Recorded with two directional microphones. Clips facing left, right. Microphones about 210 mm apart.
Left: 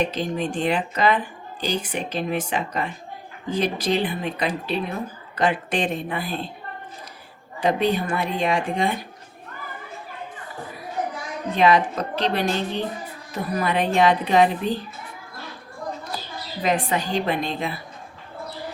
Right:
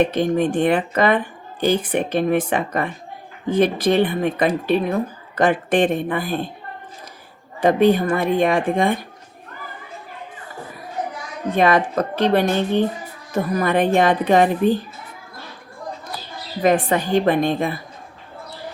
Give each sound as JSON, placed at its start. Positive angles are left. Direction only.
{"t": 0.0, "sound": "a woman's voice", "side_deg": -55}
{"t": 7.6, "sound": "a woman's voice", "side_deg": -50}
{"t": 11.5, "sound": "a woman's voice", "side_deg": -50}
{"t": 16.6, "sound": "a woman's voice", "side_deg": -50}